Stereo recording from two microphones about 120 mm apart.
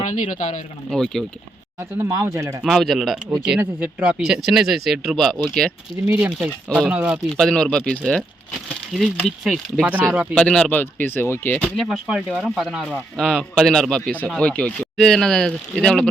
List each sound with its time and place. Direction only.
0.1 s speech: 90° left
0.9 s speech: 5° left (ahead or behind)
1.8 s speech: 25° right (ahead or behind)
2.6 s speech: centre (ahead or behind)
7.3 s speech: 5° left (ahead or behind)
9.4 s speech: centre (ahead or behind)
9.9 s speech: 15° right (ahead or behind)
10.3 s speech: 10° left (ahead or behind)
11.6 s speech: centre (ahead or behind)